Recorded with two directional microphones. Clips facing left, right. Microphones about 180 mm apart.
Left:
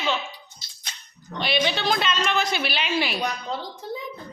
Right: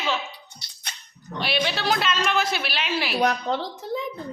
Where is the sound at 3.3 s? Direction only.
75° right (ahead or behind).